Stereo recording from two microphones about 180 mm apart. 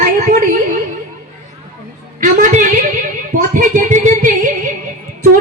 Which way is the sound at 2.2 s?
45° right (ahead or behind).